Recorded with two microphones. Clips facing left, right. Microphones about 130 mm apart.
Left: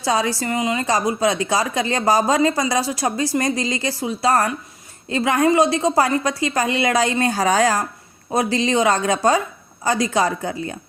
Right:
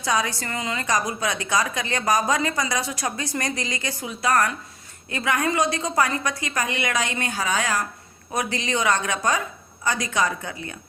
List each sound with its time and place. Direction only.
0.0 s a woman's voice: 30° left (ahead or behind)